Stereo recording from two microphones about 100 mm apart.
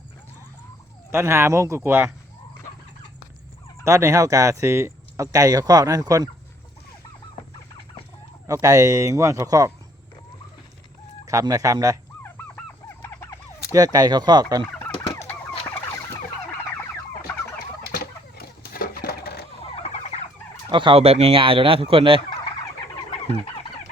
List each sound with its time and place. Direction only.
1.1 s speech: 25° right (ahead or behind)
3.8 s speech: 30° right (ahead or behind)
8.6 s speech: 35° right (ahead or behind)
11.3 s speech: 35° right (ahead or behind)
12.2 s goose: 25° left (ahead or behind)
13.7 s speech: 40° right (ahead or behind)
14.8 s fowl: 25° left (ahead or behind)
19.6 s vehicle: 80° left
20.7 s speech: 55° right (ahead or behind)
21.0 s speech: 90° right; by 22.2 s 65° right (ahead or behind)